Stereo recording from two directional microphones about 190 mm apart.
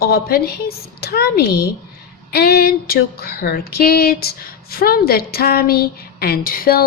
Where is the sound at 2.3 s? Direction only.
55° left (ahead or behind).